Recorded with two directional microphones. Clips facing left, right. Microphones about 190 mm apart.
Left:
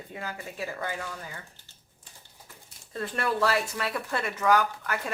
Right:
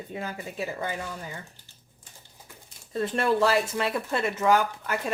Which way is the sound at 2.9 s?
25° right (ahead or behind).